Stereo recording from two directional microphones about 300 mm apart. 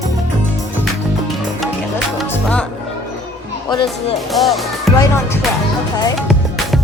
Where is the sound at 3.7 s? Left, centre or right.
Centre.